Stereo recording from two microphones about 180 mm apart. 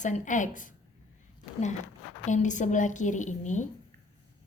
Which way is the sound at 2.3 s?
45° left (ahead or behind).